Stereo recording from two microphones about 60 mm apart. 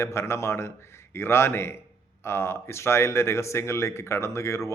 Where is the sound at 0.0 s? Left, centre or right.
Left.